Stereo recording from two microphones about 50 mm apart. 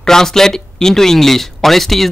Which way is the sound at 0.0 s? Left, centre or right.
Centre.